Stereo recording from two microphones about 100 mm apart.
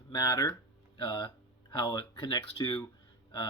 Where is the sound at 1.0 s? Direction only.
50° left (ahead or behind).